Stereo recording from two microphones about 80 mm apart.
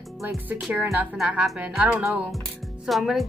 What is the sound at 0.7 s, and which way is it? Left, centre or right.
Speech, right.